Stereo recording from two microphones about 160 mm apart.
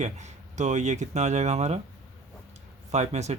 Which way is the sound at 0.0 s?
45° right (ahead or behind).